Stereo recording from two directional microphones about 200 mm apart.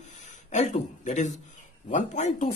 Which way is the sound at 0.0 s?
35° left (ahead or behind).